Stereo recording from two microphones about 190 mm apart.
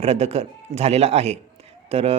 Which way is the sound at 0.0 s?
30° right (ahead or behind).